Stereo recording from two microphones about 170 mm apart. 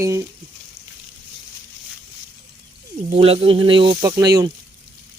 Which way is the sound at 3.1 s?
35° right (ahead or behind).